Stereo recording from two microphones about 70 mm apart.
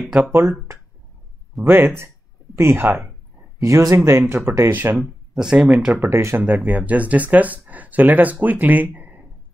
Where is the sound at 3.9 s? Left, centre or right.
Right.